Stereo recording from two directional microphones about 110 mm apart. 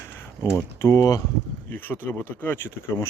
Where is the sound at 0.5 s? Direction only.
25° left (ahead or behind).